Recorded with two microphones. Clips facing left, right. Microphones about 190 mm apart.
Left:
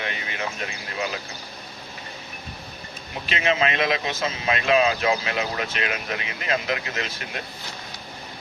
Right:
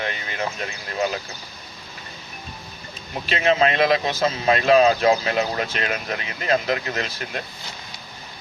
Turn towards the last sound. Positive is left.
turn(degrees=-40)  # may be behind; listen again after turning